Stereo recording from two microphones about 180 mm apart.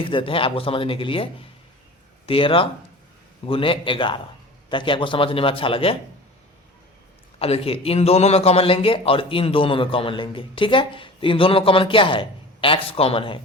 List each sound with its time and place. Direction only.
0.0 s a man's voice: 30° left (ahead or behind)
7.3 s a man's voice: 35° left (ahead or behind)